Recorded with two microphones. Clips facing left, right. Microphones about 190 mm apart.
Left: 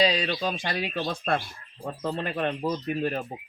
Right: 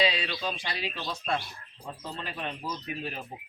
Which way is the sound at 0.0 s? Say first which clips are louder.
Left 4 dB; 40° left (ahead or behind).